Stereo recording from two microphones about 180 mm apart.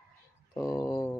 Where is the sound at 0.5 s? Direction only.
20° left (ahead or behind).